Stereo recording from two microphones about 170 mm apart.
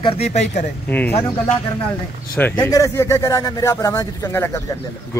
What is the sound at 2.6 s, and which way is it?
Speech, 20° left (ahead or behind).